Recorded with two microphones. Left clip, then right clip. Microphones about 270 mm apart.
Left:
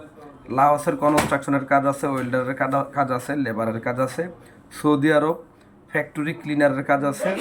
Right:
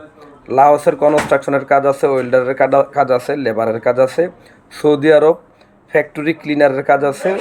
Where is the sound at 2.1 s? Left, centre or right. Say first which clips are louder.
Right 10 dB; centre.